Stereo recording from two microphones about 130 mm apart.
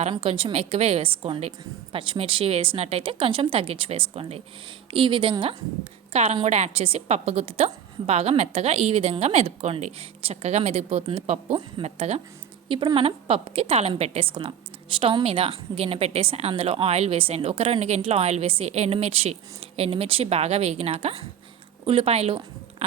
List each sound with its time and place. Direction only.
0.1 s a woman's voice: 45° right (ahead or behind)
12.6 s a woman's voice: 40° right (ahead or behind)